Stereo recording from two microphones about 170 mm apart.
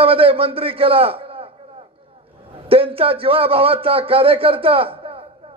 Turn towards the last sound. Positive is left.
turn(degrees=-35)  # may be behind; listen again after turning